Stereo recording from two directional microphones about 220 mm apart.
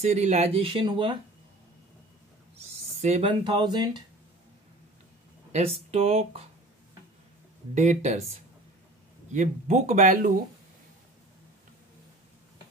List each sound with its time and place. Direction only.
0.0 s speech: 30° right (ahead or behind)
3.0 s speech: 30° right (ahead or behind)
5.5 s speech: 30° right (ahead or behind)
7.7 s speech: 30° right (ahead or behind)
9.3 s speech: 35° right (ahead or behind)